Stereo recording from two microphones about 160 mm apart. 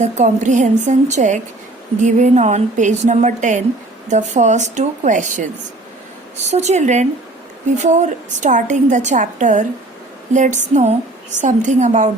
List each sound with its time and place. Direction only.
0.0 s a woman's voice: 50° right (ahead or behind)